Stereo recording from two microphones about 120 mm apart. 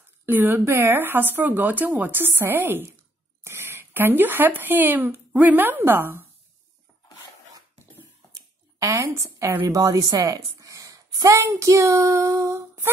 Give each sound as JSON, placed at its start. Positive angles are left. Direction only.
{"t": 0.3, "sound": "speech", "side_deg": -15}
{"t": 8.3, "sound": "a sound", "side_deg": -25}
{"t": 9.8, "sound": "a woman's voice", "side_deg": -30}